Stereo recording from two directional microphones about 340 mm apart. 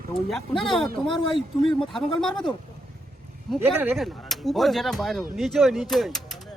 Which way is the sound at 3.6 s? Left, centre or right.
Centre.